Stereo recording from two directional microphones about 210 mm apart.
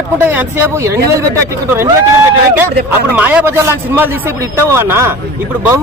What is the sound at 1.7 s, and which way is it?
Speech, 15° right (ahead or behind).